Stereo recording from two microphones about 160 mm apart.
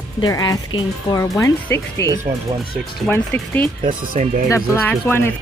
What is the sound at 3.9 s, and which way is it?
Speech, 55° right (ahead or behind).